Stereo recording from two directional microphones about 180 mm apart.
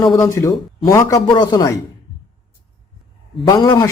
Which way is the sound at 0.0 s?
20° left (ahead or behind).